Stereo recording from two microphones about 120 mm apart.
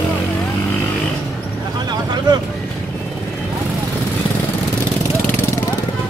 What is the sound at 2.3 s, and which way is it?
Vehicle, 35° right (ahead or behind).